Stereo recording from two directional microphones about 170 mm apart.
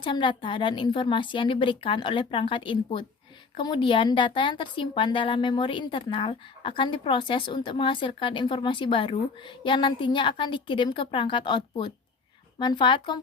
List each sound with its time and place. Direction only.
0.0 s a woman's voice: 30° left (ahead or behind)